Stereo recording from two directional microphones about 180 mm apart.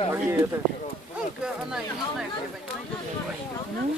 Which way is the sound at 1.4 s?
5° right (ahead or behind).